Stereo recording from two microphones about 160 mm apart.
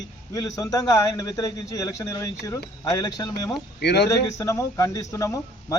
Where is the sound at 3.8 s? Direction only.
90° left.